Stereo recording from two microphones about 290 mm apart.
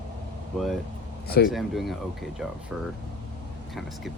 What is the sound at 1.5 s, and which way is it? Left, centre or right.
Speech, centre.